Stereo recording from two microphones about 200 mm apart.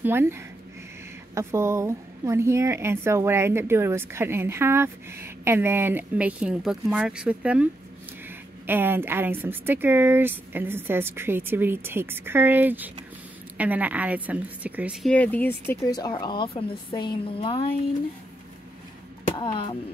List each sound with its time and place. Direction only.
0.0 s a woman's voice: 10° right (ahead or behind)
8.6 s a woman's voice: 10° right (ahead or behind)
15.0 s speech: 5° left (ahead or behind); by 17.7 s 25° left (ahead or behind)
19.3 s speech: 25° left (ahead or behind)